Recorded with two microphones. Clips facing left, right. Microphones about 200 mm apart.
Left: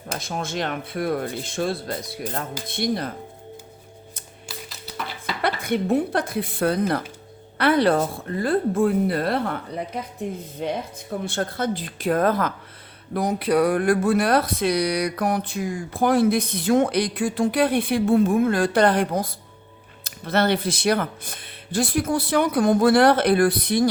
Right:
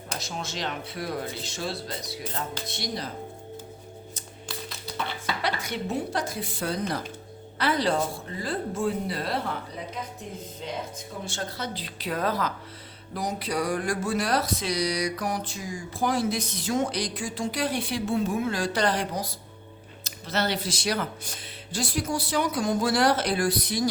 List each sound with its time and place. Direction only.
0.2 s speech: 55° left (ahead or behind)
5.4 s speech: 55° left (ahead or behind)